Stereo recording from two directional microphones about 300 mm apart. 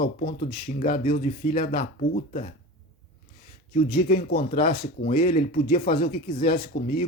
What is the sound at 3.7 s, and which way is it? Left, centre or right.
Speech, left.